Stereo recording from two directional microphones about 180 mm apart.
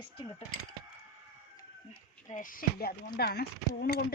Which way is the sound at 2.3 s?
50° left (ahead or behind).